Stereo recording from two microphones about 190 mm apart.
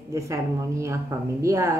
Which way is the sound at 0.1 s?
15° right (ahead or behind).